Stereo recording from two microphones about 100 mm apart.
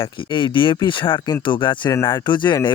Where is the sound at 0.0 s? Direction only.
55° left (ahead or behind).